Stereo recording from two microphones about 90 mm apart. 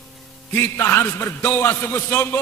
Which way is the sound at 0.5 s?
25° left (ahead or behind).